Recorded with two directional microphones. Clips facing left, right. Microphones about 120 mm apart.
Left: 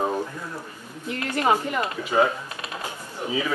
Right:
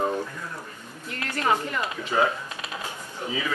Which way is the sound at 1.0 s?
20° left (ahead or behind).